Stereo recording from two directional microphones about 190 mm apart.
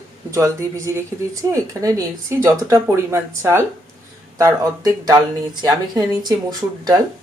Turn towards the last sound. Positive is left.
turn(degrees=-20)  # may be behind; listen again after turning